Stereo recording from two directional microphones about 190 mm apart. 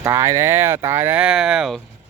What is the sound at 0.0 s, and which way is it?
Speech, 15° right (ahead or behind).